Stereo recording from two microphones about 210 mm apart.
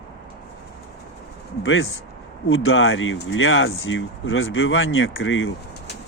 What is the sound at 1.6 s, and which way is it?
Speech, 70° left (ahead or behind).